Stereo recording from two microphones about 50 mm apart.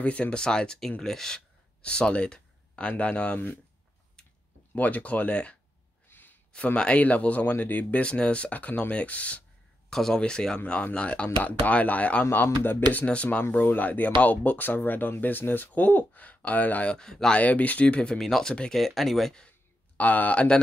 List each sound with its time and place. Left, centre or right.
0.0 s speech: left; by 1.4 s centre
1.8 s a sound: left
3.0 s speech: left
4.2 s a sound: centre
4.7 s speech: left
6.0 s a sound: left
6.5 s speech: left
8.0 s speech: left
9.8 s speech: centre
10.7 s speech: left
16.9 s speech: centre
17.3 s speech: left
18.1 s speech: centre
20.0 s speech: left